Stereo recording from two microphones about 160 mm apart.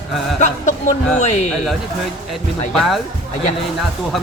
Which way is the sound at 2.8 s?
Centre (ahead or behind).